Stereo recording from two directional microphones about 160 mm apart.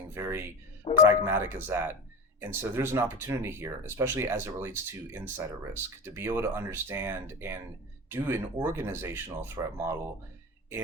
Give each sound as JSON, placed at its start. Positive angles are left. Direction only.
{"t": 0.1, "sound": "speech", "side_deg": -15}